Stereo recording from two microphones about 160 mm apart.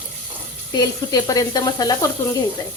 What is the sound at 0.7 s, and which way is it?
Sizzle, 25° left (ahead or behind).